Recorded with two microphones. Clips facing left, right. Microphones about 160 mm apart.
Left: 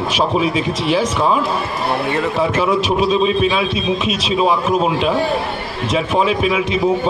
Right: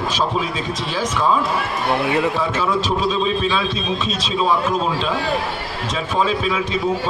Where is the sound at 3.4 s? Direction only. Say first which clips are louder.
Left 4 dB; 15° left (ahead or behind).